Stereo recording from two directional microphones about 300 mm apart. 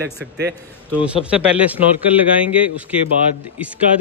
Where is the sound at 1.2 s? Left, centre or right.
Centre.